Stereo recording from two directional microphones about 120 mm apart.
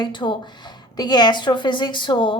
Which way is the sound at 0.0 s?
40° left (ahead or behind).